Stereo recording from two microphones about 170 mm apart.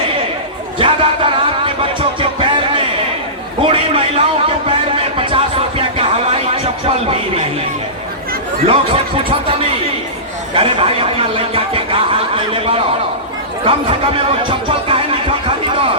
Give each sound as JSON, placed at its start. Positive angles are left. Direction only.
{"t": 0.8, "sound": "music", "side_deg": -30}
{"t": 3.6, "sound": "a sound", "side_deg": -35}
{"t": 8.6, "sound": "speech", "side_deg": -35}